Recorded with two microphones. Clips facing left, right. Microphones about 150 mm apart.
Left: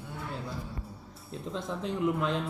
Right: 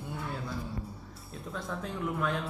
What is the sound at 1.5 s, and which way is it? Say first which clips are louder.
Speech: left 4 dB; 20° left (ahead or behind).